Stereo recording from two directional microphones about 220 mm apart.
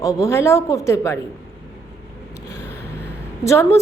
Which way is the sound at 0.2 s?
15° left (ahead or behind).